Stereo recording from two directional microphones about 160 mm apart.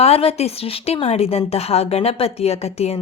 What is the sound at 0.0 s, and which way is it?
A woman's voice, 40° left (ahead or behind).